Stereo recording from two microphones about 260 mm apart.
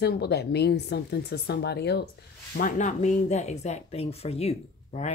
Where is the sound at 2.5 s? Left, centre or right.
Left.